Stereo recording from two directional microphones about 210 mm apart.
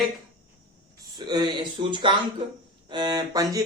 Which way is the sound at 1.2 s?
20° right (ahead or behind).